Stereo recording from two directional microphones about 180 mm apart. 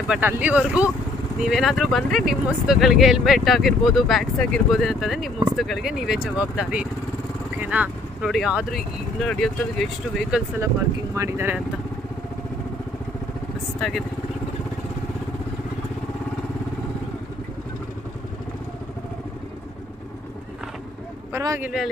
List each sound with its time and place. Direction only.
0.1 s speech: 10° right (ahead or behind)
11.1 s speech: 15° right (ahead or behind)
13.7 s speech: centre (ahead or behind)
21.3 s speech: 15° right (ahead or behind)